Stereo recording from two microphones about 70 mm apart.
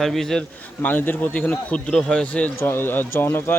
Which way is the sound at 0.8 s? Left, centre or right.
Left.